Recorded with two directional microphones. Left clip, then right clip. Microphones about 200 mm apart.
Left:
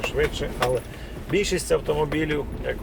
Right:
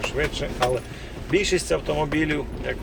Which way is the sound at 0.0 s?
20° left (ahead or behind).